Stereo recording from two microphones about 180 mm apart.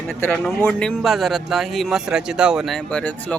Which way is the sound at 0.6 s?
5° left (ahead or behind).